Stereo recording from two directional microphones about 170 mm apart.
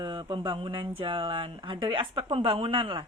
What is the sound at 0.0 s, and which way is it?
Speech, 25° right (ahead or behind).